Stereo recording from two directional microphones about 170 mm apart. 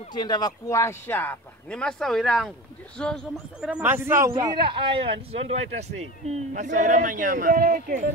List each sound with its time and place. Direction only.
0.1 s speech: 25° left (ahead or behind); by 3.1 s 5° left (ahead or behind)
3.6 s a man's voice: 10° right (ahead or behind)
5.3 s a man's voice: 40° right (ahead or behind); by 8.0 s 55° right (ahead or behind)